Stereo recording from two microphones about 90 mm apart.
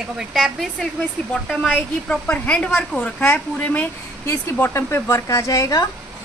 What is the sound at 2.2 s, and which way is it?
A woman's voice, 15° left (ahead or behind).